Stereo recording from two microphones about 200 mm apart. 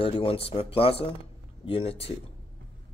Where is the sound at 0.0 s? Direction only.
25° left (ahead or behind).